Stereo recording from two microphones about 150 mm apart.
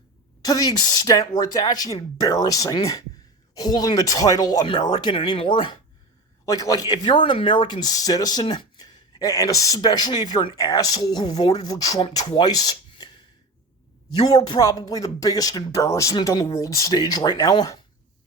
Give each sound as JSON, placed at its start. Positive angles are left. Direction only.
{"t": 0.4, "sound": "speech", "side_deg": 25}
{"t": 11.9, "sound": "speech", "side_deg": 35}
{"t": 14.4, "sound": "speech", "side_deg": 25}